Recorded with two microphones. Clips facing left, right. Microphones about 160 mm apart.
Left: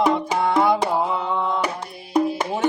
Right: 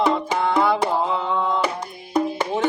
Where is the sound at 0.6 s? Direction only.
15° left (ahead or behind).